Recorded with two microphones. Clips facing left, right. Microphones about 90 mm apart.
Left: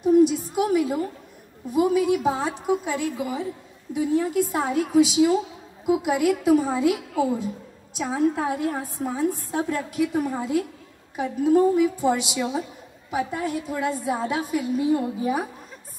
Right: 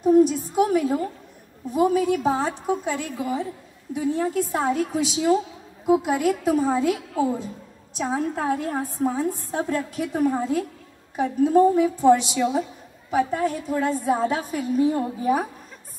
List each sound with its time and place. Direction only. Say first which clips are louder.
0.0 s a woman's voice: right 1 dB; 40° right (ahead or behind)